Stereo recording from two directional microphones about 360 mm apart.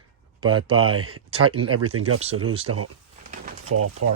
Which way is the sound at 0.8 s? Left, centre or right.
Right.